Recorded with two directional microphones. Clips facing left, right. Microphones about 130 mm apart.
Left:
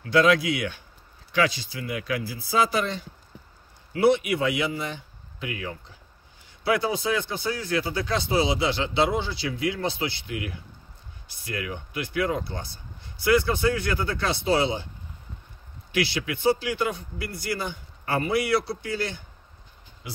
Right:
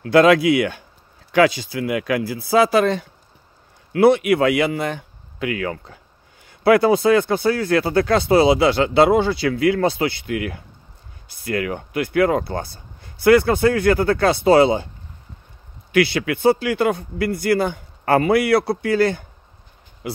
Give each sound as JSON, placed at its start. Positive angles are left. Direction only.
{"t": 0.0, "sound": "speech", "side_deg": -70}
{"t": 1.4, "sound": "a man's voice", "side_deg": -80}
{"t": 15.9, "sound": "a man's voice", "side_deg": -55}